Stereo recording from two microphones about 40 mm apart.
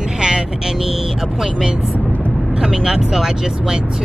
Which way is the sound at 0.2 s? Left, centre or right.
Centre.